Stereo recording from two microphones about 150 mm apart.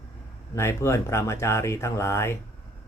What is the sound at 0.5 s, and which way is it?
Speech, 20° left (ahead or behind).